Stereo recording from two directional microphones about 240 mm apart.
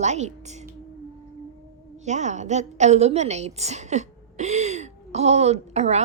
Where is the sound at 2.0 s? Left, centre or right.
Right.